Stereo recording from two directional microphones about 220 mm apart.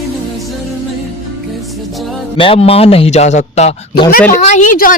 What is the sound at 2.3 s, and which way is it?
A man's voice, 25° left (ahead or behind).